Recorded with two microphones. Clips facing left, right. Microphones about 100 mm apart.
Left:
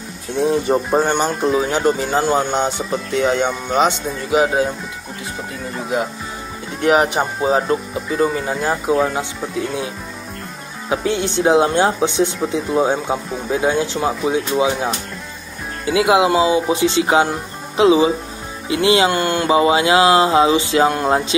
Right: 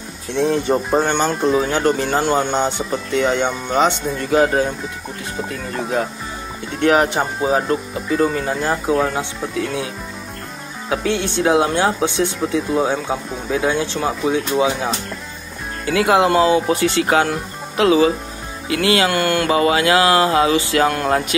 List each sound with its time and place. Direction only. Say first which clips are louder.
0.3 s speech: left 1 dB; 10° left (ahead or behind)
5.8 s speech: even; 10° left (ahead or behind)
10.9 s music: left 1 dB; 15° left (ahead or behind)
12.5 s speech: left 1 dB; 20° left (ahead or behind)
15.8 s speech: left 1 dB; 15° left (ahead or behind)
18.7 s music: left 2 dB; 20° left (ahead or behind)